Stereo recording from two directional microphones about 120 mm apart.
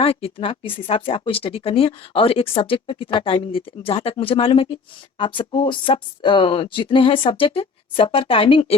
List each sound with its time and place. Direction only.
0.0 s speech: 50° left (ahead or behind)